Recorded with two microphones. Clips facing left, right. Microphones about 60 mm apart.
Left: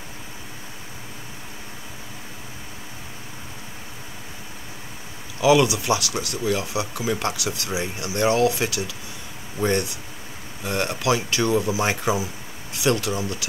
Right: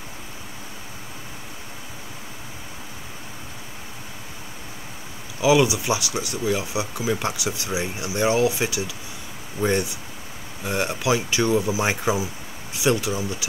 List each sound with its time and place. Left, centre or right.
5.4 s speech: centre